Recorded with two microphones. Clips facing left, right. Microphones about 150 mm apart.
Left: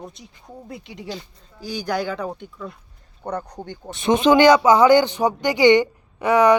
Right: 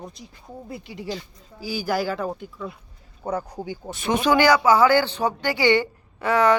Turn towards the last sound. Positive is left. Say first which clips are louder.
# left 4 dB
turn(degrees=15)  # may be behind; listen again after turning